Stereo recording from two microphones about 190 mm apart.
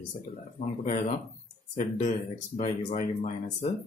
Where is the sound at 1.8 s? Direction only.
40° left (ahead or behind).